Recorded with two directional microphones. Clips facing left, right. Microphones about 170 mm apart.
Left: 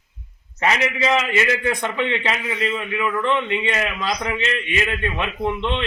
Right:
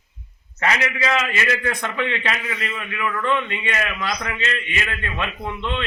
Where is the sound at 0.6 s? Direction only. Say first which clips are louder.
Left 2 dB; 20° left (ahead or behind).